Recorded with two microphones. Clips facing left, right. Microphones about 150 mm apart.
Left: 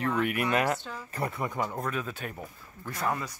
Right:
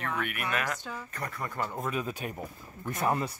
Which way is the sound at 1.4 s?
15° left (ahead or behind).